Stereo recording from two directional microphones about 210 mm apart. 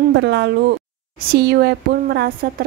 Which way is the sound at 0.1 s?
55° right (ahead or behind).